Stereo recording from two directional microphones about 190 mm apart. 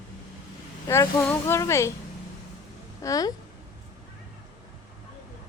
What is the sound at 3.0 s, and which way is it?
Speech, 20° left (ahead or behind).